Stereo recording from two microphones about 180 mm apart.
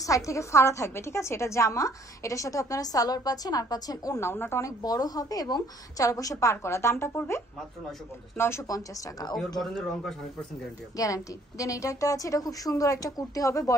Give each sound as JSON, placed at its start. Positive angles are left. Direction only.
{"t": 0.0, "sound": "a woman's voice", "side_deg": 15}
{"t": 9.6, "sound": "a man's voice", "side_deg": 0}
{"t": 11.0, "sound": "a woman's voice", "side_deg": 20}